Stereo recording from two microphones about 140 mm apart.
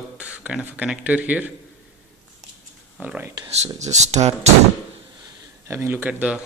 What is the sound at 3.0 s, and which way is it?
Speech, 10° right (ahead or behind).